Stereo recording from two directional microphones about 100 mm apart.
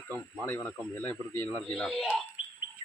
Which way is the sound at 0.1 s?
20° left (ahead or behind).